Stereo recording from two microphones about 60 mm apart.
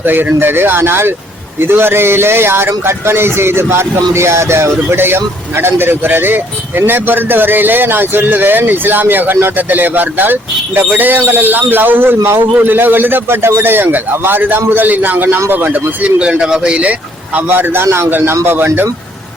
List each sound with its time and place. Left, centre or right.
0.0 s a man's voice: right; by 16.9 s centre
17.3 s a man's voice: right